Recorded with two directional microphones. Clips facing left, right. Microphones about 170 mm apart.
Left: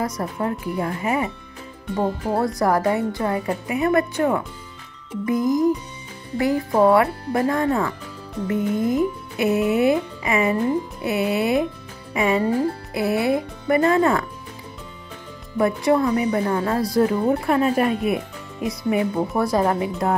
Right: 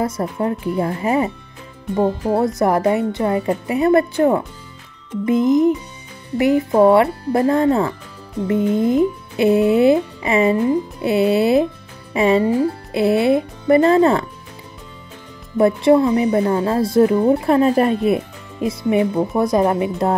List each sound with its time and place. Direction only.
0.0 s speech: 25° right (ahead or behind)
2.0 s speech: 20° right (ahead or behind)
15.5 s speech: 25° right (ahead or behind)